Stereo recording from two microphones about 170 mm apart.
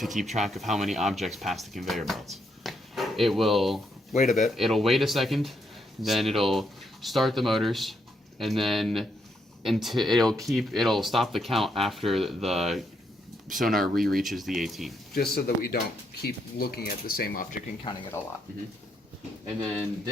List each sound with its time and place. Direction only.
0.0 s speech: centre (ahead or behind)
2.3 s drawer open or close: centre (ahead or behind)
4.4 s speech: centre (ahead or behind)
15.1 s speech: 65° left (ahead or behind)
17.9 s speech: 30° left (ahead or behind)